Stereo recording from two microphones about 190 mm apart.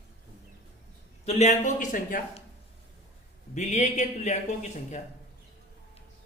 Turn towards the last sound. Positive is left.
turn(degrees=35)  # may be behind; listen again after turning